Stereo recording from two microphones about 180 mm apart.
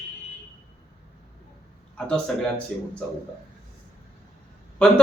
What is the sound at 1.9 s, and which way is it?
Speech, 5° left (ahead or behind).